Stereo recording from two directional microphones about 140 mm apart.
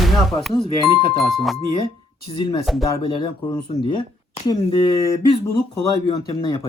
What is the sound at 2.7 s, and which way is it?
Speech, centre (ahead or behind).